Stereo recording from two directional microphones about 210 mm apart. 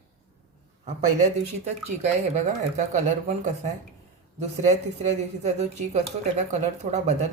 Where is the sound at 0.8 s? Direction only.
35° right (ahead or behind).